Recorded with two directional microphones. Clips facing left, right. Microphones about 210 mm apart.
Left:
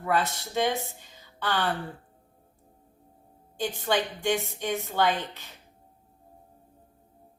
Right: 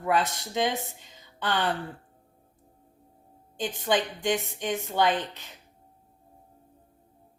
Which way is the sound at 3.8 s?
15° right (ahead or behind).